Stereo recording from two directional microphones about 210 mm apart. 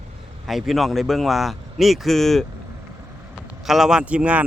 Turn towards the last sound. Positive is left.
turn(degrees=-5)  # may be behind; listen again after turning